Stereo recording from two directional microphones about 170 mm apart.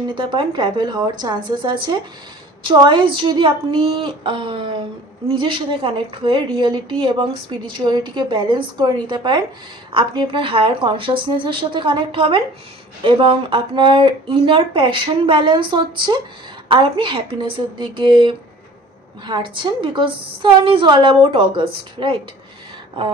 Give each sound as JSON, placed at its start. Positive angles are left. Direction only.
{"t": 0.1, "sound": "a woman's voice", "side_deg": -30}